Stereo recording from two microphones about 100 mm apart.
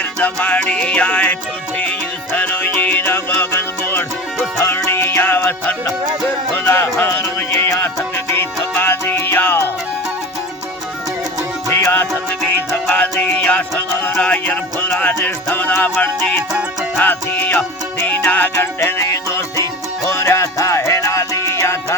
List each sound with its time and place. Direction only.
0.0 s music: 15° left (ahead or behind)
11.7 s music: 25° left (ahead or behind)
16.5 s music: 5° right (ahead or behind)
17.0 s music: 20° left (ahead or behind)